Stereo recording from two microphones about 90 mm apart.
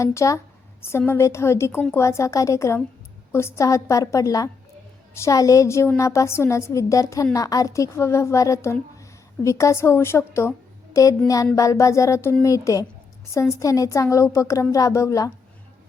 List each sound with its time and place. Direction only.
0.0 s a woman's voice: 35° left (ahead or behind)
11.5 s a woman's voice: 35° left (ahead or behind)